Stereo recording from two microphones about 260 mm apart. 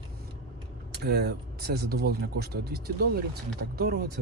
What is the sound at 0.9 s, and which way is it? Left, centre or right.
Speech, right.